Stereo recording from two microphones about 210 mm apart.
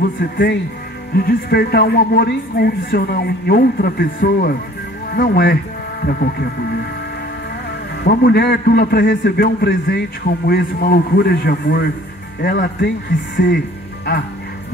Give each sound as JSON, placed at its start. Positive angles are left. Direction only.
{"t": 0.2, "sound": "a man's voice", "side_deg": 45}
{"t": 8.0, "sound": "a man's voice", "side_deg": 50}